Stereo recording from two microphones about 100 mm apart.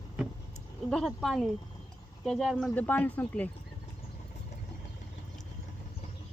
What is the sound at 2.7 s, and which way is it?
Speech, 15° left (ahead or behind).